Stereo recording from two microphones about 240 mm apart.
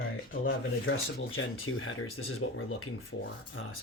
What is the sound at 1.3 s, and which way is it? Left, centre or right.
Speech, left.